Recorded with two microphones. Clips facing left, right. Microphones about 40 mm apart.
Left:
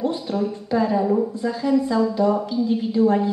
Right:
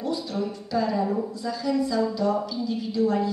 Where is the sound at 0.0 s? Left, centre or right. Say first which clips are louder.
Left 5 dB; left.